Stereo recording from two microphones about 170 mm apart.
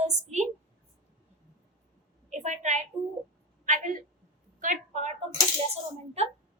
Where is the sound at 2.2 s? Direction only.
45° right (ahead or behind).